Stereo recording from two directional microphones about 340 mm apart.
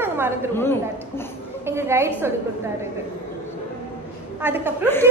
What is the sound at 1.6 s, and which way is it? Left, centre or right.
Speech, centre.